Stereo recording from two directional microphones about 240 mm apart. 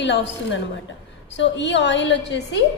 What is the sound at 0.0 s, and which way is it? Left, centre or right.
A woman's voice, left.